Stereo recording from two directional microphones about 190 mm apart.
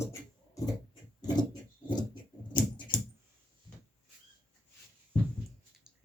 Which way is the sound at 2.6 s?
25° left (ahead or behind).